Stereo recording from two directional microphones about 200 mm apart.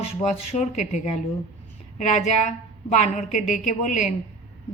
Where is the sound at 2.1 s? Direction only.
35° left (ahead or behind).